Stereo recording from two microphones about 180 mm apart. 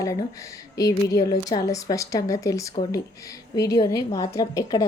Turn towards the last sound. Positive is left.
turn(degrees=20)  # may be behind; listen again after turning